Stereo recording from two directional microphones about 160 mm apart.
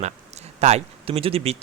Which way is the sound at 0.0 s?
45° right (ahead or behind).